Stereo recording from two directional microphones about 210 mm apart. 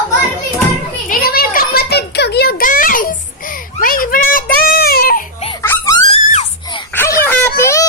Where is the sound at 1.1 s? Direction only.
45° left (ahead or behind).